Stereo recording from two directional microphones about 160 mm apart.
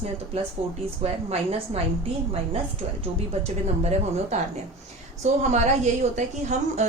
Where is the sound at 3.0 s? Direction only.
45° right (ahead or behind).